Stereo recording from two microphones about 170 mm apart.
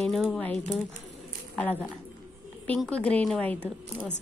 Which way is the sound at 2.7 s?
5° left (ahead or behind).